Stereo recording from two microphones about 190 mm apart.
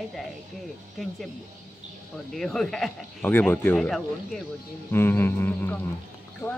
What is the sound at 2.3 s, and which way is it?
Speech, centre (ahead or behind).